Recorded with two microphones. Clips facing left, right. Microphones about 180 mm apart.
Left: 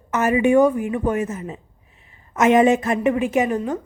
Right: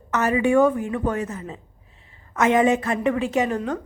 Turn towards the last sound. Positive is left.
turn(degrees=10)  # may be behind; listen again after turning